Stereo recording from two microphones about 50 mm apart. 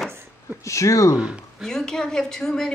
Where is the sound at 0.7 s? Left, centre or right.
Left.